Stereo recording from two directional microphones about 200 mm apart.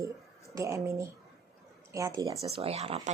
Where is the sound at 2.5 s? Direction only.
30° right (ahead or behind).